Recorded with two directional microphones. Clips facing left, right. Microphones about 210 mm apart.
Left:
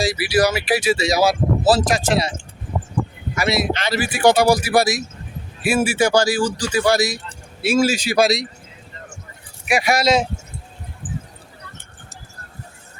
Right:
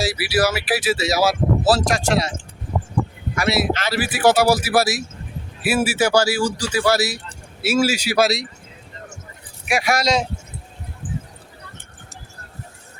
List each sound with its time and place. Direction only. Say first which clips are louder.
0.0 s speech: left 2 dB; 5° right (ahead or behind)
3.3 s speech: even; centre (ahead or behind)
9.6 s speech: left 2 dB; centre (ahead or behind)
11.0 s a sound: right 1 dB; 25° right (ahead or behind)